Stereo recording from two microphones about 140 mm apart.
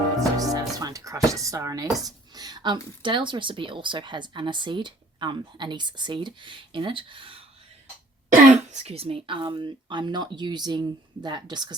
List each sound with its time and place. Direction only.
0.3 s music: 25° right (ahead or behind)
2.0 s speech: 25° right (ahead or behind)
8.3 s speech: 60° right (ahead or behind); by 11.8 s 30° right (ahead or behind)